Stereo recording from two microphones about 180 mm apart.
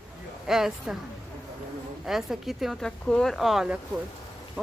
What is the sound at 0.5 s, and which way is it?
Speech, centre (ahead or behind).